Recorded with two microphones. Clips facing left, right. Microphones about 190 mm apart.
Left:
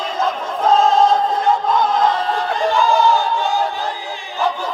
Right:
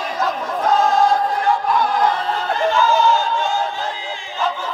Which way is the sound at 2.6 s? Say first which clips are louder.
Left 1 dB; 15° left (ahead or behind).